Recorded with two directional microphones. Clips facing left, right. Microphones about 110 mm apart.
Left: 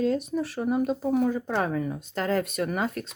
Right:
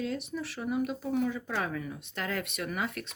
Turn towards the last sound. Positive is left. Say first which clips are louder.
# left 6 dB
turn(degrees=40)  # may be behind; listen again after turning